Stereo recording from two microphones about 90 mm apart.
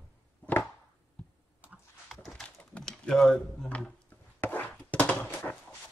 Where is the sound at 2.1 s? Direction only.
Centre (ahead or behind).